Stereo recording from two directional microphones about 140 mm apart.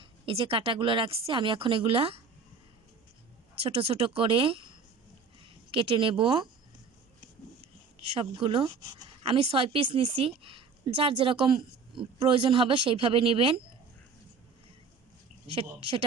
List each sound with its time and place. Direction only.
0.0 s a woman's voice: 40° right (ahead or behind)
3.6 s a woman's voice: 45° right (ahead or behind)
8.2 s a woman's voice: 40° right (ahead or behind)
8.6 s speech: 25° right (ahead or behind)
9.2 s a woman's voice: 45° right (ahead or behind)
15.5 s a woman's voice: 40° right (ahead or behind)